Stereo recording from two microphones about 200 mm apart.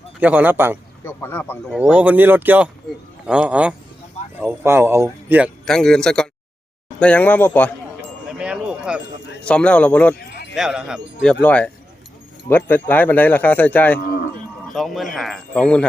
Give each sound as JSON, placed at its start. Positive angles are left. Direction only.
{"t": 0.2, "sound": "speech", "side_deg": -5}
{"t": 1.0, "sound": "speech", "side_deg": 10}
{"t": 1.8, "sound": "speech", "side_deg": -10}
{"t": 5.6, "sound": "speech", "side_deg": 5}
{"t": 8.3, "sound": "wind chime", "side_deg": -5}
{"t": 9.5, "sound": "speech", "side_deg": 5}